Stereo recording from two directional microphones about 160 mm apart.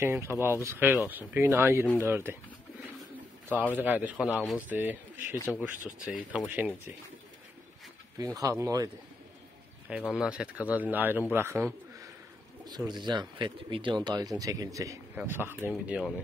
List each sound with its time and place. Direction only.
0.0 s speech: 15° right (ahead or behind)
3.7 s speech: 10° right (ahead or behind)
4.6 s speech: 10° right (ahead or behind)
5.5 s speech: 5° left (ahead or behind)
5.9 s speech: 5° right (ahead or behind)
8.2 s speech: 20° right (ahead or behind)
9.8 s a man's voice: 5° right (ahead or behind)
12.6 s speech: 25° right (ahead or behind); by 16.1 s 5° right (ahead or behind)